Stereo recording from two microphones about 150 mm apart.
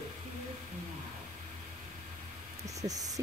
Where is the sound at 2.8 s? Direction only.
25° right (ahead or behind).